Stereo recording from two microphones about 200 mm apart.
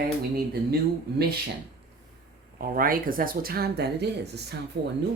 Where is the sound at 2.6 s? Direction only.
45° right (ahead or behind).